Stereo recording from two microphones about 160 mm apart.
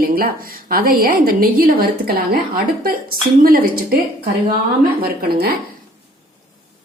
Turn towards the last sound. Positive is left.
turn(degrees=-70)  # may be behind; listen again after turning